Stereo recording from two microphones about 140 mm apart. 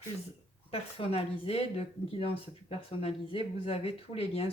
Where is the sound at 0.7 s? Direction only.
45° left (ahead or behind).